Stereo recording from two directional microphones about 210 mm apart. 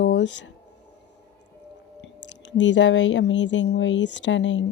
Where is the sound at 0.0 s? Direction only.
60° left (ahead or behind).